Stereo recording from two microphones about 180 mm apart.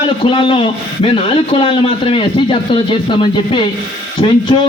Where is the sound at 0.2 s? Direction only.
30° left (ahead or behind).